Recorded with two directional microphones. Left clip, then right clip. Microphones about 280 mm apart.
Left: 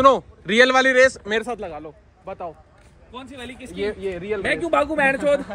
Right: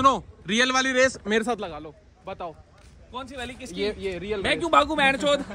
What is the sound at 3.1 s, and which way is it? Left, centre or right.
Speech, right.